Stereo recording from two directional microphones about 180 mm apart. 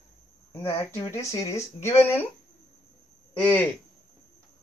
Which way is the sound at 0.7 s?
15° left (ahead or behind).